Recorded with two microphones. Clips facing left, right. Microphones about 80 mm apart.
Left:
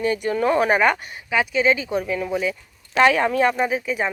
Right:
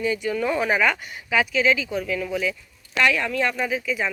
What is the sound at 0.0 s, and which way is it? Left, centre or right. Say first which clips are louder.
Speech: left 2 dB; left.